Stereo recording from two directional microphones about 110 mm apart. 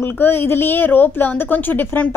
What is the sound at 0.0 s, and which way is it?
A woman's voice, 20° left (ahead or behind).